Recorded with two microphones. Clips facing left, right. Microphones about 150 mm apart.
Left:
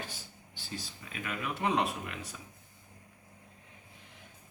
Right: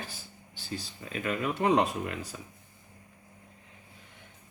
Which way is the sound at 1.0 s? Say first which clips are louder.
Right 8 dB; 35° right (ahead or behind).